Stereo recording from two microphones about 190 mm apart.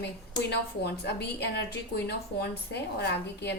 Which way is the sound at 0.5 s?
60° left (ahead or behind).